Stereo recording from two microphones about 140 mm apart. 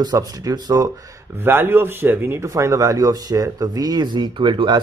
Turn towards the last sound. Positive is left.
turn(degrees=-35)  # may be behind; listen again after turning